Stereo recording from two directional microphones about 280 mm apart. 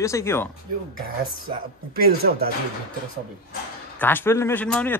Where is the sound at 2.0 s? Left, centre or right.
Right.